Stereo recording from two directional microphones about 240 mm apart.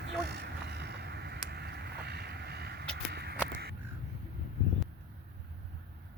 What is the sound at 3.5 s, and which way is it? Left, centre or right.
Crow, right.